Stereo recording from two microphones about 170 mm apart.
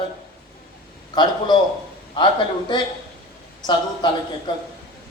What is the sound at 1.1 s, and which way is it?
A man's voice, 25° left (ahead or behind).